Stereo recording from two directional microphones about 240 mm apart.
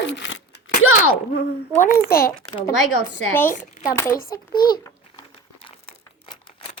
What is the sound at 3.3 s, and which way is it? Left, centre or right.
Speech, centre.